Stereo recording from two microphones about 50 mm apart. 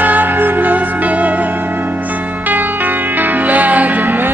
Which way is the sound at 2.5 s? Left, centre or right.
Right.